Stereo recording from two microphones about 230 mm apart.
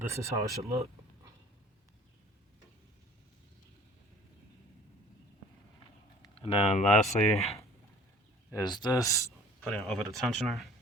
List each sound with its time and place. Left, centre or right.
0.1 s speech: centre
6.2 s speech: left
8.4 s speech: centre